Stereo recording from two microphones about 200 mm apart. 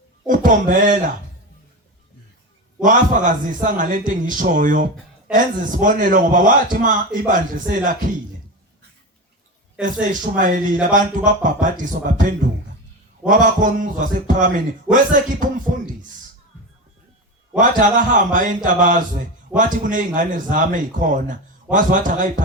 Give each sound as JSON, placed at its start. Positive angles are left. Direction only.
{"t": 0.3, "sound": "speech", "side_deg": -40}
{"t": 2.8, "sound": "a man's voice", "side_deg": -40}
{"t": 9.8, "sound": "a man's voice", "side_deg": -40}
{"t": 17.6, "sound": "a man's voice", "side_deg": -40}